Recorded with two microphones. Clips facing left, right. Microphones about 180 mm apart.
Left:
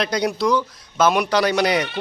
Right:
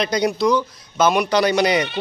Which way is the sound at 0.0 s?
Centre (ahead or behind).